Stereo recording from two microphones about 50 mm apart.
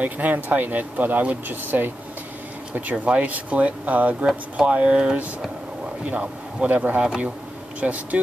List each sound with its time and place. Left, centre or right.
0.0 s speech: right
2.7 s a man's voice: right